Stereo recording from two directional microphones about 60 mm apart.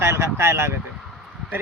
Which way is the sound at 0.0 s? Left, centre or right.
Right.